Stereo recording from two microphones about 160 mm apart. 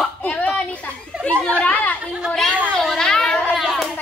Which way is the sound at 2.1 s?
Centre (ahead or behind).